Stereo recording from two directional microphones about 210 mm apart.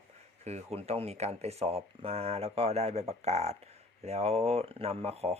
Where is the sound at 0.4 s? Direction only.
30° right (ahead or behind).